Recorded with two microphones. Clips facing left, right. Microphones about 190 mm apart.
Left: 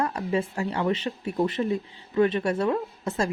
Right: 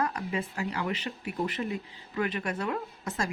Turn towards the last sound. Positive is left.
turn(degrees=25)  # may be behind; listen again after turning